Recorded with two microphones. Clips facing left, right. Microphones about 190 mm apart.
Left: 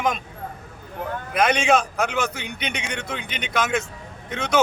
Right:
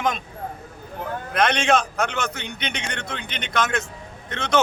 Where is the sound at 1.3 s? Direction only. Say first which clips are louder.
Left 1 dB; 5° left (ahead or behind).